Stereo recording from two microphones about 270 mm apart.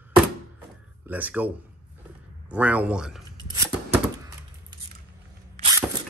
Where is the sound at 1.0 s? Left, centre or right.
Centre.